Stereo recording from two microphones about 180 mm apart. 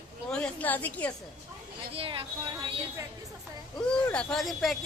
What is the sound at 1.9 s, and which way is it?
Speech, 30° right (ahead or behind).